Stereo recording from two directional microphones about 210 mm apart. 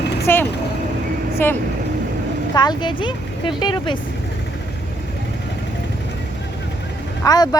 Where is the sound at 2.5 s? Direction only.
20° left (ahead or behind).